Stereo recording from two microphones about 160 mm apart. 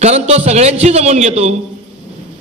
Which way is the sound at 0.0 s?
40° right (ahead or behind).